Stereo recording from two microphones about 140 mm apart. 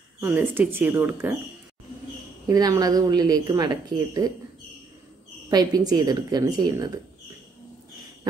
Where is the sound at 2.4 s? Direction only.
25° right (ahead or behind).